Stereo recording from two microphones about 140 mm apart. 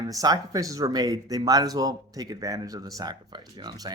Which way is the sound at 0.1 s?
25° right (ahead or behind).